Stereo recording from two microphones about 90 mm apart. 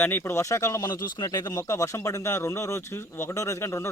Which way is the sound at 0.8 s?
50° left (ahead or behind).